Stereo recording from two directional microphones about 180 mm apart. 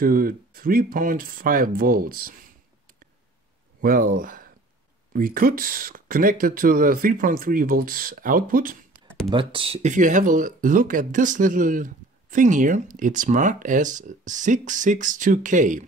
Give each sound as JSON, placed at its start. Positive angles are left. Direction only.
{"t": 0.0, "sound": "speech", "side_deg": -55}
{"t": 3.8, "sound": "speech", "side_deg": -55}
{"t": 9.3, "sound": "speech", "side_deg": -30}